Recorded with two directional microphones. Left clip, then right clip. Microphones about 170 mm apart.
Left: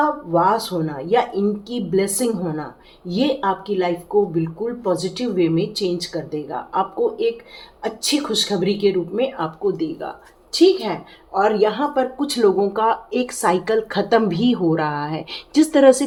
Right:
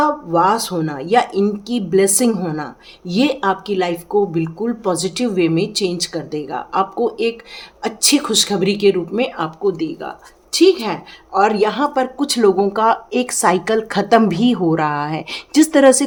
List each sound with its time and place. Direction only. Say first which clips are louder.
0.3 s speech: right 2 dB; 45° right (ahead or behind)
9.6 s speech: right 2 dB; 25° right (ahead or behind)